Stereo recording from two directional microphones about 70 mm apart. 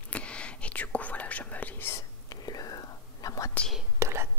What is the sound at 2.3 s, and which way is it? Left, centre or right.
Whispering, left.